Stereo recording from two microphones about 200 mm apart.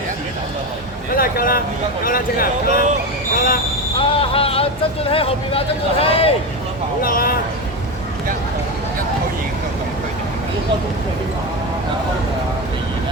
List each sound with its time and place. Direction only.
1.1 s speech: 45° left (ahead or behind)
4.1 s a sound: 30° left (ahead or behind)
5.0 s speech: 30° left (ahead or behind)
7.0 s speech: 45° left (ahead or behind)